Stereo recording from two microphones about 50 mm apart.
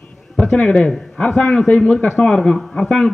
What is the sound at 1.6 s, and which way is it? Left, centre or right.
Speech, left.